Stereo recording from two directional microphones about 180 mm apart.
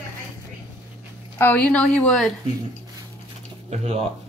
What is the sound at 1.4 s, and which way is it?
Speech, 10° left (ahead or behind).